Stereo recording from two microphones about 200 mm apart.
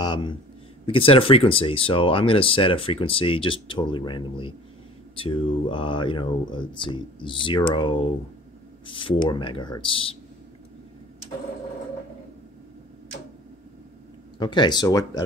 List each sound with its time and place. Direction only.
0.0 s speech: 20° left (ahead or behind)
14.4 s speech: 20° left (ahead or behind)